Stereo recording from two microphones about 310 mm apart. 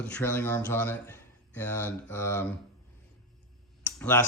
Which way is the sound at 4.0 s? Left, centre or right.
Centre.